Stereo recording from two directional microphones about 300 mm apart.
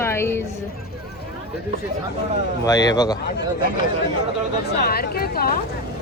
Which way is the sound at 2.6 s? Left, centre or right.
Centre.